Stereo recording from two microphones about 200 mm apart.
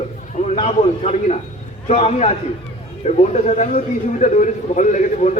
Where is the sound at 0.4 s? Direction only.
30° left (ahead or behind).